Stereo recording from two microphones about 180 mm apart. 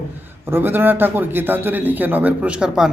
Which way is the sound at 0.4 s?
10° right (ahead or behind).